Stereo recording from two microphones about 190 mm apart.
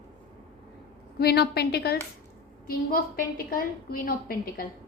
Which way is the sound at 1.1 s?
55° left (ahead or behind).